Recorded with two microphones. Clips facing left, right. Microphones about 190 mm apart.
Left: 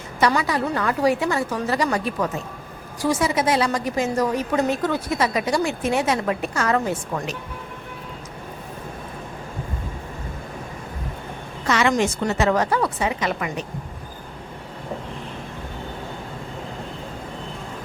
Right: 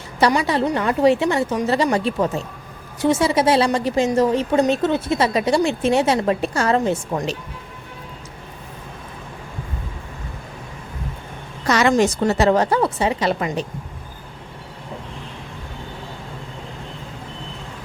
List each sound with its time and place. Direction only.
0.3 s a woman's voice: 25° right (ahead or behind)
11.6 s a sound: 40° right (ahead or behind)
12.3 s a woman's voice: 35° right (ahead or behind)